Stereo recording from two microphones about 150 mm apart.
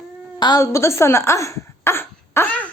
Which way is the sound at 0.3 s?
30° left (ahead or behind).